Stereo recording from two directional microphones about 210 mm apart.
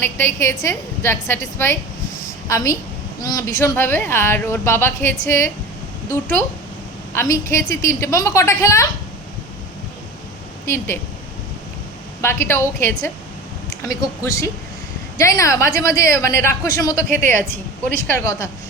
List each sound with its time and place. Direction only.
0.0 s a woman's voice: 10° left (ahead or behind)
7.1 s a woman's voice: 15° left (ahead or behind)
10.7 s a woman's voice: 10° left (ahead or behind)
12.2 s a woman's voice: 10° left (ahead or behind)